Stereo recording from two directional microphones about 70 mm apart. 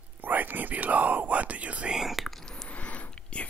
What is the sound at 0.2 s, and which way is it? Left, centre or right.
Whispering, right.